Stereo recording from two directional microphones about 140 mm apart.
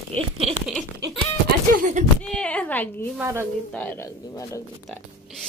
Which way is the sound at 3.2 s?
20° right (ahead or behind).